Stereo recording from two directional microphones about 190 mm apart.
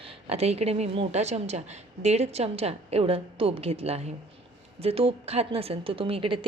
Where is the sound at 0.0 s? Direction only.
30° right (ahead or behind).